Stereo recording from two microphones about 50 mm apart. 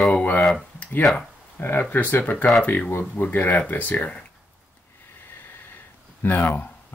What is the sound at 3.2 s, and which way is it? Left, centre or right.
Speech, left.